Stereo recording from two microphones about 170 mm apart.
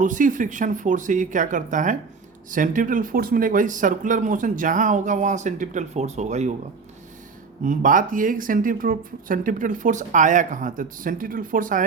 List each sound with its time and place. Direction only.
0.0 s speech: 50° right (ahead or behind)
7.6 s speech: 50° right (ahead or behind)